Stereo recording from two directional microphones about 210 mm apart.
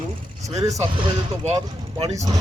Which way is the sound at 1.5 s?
25° right (ahead or behind).